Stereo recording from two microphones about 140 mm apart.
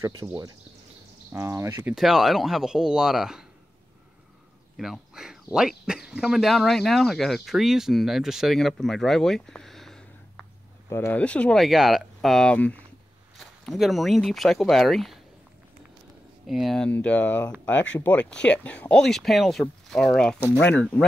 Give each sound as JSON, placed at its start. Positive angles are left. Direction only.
{"t": 0.2, "sound": "speech", "side_deg": -15}
{"t": 2.0, "sound": "speech", "side_deg": 0}
{"t": 4.7, "sound": "speech", "side_deg": 0}
{"t": 10.9, "sound": "speech", "side_deg": 15}
{"t": 13.4, "sound": "speech", "side_deg": 0}
{"t": 16.4, "sound": "speech", "side_deg": 0}